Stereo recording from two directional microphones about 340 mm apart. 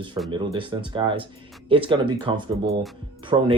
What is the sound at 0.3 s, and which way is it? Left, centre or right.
Speech, centre.